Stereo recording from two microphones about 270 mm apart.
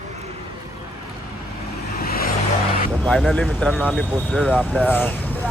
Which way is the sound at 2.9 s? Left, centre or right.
Centre.